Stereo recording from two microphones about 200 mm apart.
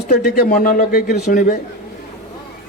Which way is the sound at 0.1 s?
45° left (ahead or behind).